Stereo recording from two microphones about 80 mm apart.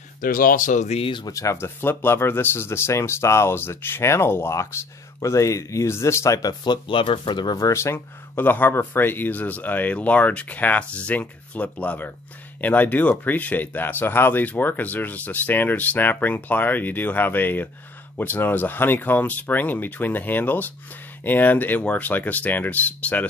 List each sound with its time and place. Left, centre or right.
1.3 s speech: left
1.8 s speech: left
6.4 s speech: left
7.5 s speech: left